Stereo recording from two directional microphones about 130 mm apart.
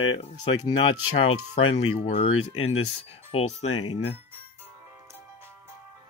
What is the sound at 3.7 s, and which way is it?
Speech, 40° left (ahead or behind).